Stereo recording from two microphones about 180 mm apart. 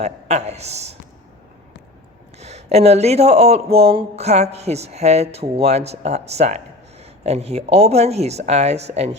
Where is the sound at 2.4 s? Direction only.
35° right (ahead or behind).